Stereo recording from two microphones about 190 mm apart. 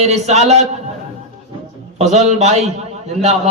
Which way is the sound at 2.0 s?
35° right (ahead or behind).